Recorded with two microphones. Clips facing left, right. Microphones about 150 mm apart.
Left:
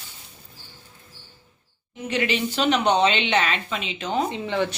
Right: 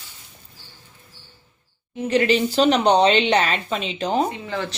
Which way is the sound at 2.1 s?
35° right (ahead or behind).